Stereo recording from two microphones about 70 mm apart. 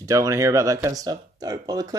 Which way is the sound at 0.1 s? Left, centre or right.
Right.